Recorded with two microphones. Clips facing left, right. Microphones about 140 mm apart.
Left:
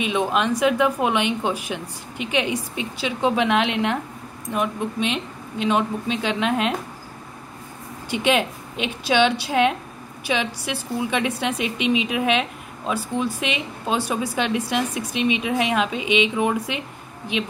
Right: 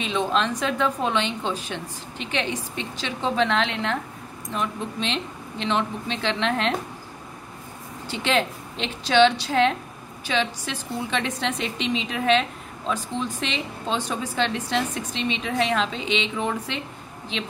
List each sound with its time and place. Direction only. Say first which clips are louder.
0.0 s a woman's voice: left 2 dB; 10° left (ahead or behind)
8.1 s a woman's voice: left 3 dB; 15° left (ahead or behind)